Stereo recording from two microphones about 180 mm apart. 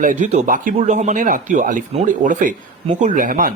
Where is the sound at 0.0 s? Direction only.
45° right (ahead or behind).